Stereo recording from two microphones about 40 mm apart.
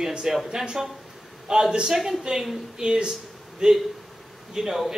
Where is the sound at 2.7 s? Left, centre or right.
Right.